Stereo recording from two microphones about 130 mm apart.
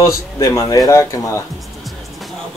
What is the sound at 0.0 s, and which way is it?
Speech, 25° left (ahead or behind).